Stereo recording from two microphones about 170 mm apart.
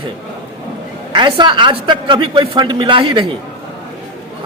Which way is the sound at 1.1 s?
25° right (ahead or behind).